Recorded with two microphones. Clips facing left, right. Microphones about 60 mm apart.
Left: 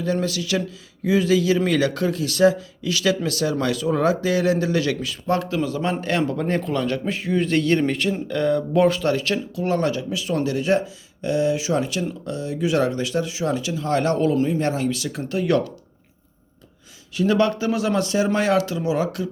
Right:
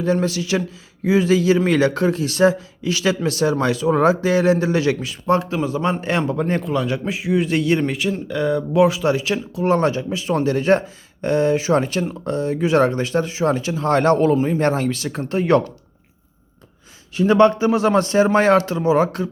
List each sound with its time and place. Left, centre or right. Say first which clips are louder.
0.0 s a man's voice: right 4 dB; right
9.6 s speech: right 5 dB; right
17.2 s speech: right 5 dB; right